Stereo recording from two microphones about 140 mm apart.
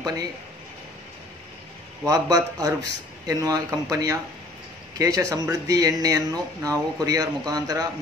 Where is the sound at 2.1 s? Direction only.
25° right (ahead or behind).